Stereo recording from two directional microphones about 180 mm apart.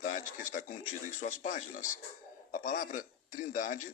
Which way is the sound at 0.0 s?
45° left (ahead or behind).